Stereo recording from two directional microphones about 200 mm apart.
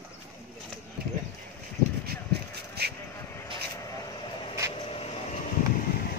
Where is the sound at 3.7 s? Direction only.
20° left (ahead or behind).